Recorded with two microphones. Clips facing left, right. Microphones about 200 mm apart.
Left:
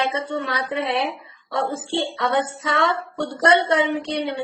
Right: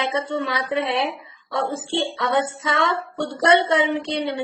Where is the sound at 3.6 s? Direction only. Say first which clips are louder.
Even; 25° right (ahead or behind).